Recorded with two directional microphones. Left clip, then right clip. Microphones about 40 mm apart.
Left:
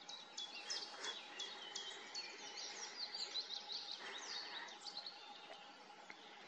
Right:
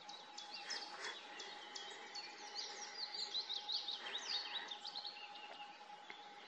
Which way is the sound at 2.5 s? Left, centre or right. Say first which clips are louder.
Right 2 dB; right.